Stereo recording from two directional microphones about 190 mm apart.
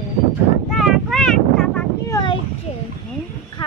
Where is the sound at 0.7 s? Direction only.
Centre (ahead or behind).